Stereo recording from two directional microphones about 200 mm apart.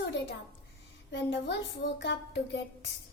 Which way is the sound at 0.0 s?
60° left (ahead or behind).